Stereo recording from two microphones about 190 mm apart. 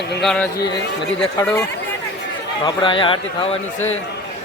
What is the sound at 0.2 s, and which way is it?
Speech, centre (ahead or behind).